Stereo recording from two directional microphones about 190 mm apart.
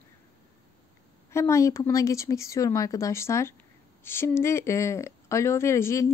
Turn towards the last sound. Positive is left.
turn(degrees=15)  # may be behind; listen again after turning